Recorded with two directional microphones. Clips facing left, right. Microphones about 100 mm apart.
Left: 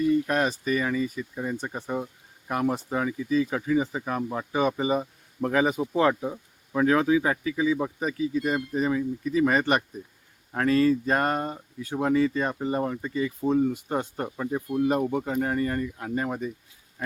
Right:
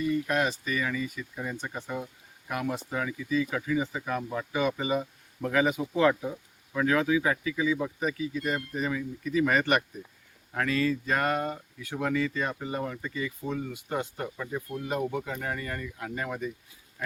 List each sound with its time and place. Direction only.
0.3 s speech: 40° left (ahead or behind)